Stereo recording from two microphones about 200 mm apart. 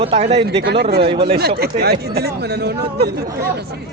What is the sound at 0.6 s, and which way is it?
Speech, 55° right (ahead or behind).